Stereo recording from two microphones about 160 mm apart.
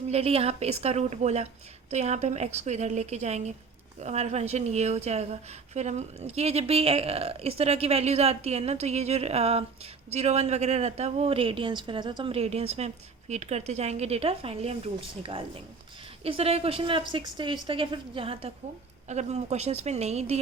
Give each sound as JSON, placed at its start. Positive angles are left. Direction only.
{"t": 0.1, "sound": "a woman's voice", "side_deg": -40}